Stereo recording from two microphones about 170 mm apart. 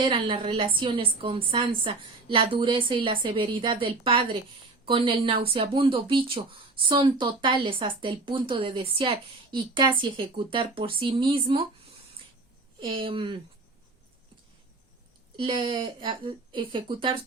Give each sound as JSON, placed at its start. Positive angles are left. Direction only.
{"t": 0.0, "sound": "speech", "side_deg": -30}
{"t": 15.4, "sound": "speech", "side_deg": -30}